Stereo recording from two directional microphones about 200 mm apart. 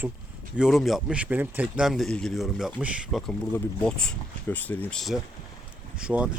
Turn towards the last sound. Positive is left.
turn(degrees=-5)  # may be behind; listen again after turning